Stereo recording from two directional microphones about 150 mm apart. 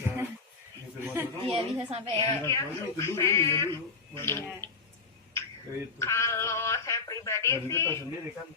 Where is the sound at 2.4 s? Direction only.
20° left (ahead or behind).